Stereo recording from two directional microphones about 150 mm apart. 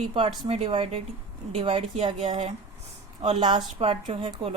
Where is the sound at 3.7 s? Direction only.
40° right (ahead or behind).